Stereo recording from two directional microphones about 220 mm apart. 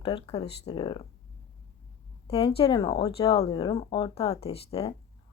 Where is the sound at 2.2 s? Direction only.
25° left (ahead or behind).